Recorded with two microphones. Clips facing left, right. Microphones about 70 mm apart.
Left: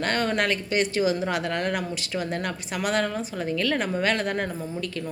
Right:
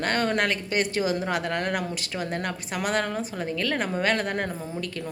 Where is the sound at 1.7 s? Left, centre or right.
Right.